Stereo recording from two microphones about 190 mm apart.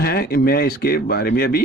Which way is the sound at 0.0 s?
55° left (ahead or behind).